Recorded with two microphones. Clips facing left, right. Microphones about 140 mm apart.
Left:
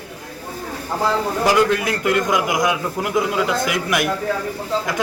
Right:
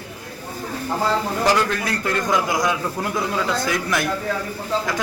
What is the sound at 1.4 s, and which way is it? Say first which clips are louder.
A man's voice: left 4 dB; 20° left (ahead or behind).